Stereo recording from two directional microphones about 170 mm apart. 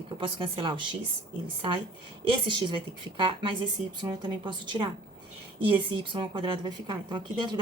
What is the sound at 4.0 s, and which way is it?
Speech, 25° right (ahead or behind).